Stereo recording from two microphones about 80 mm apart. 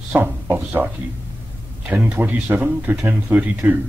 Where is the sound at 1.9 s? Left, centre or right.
Centre.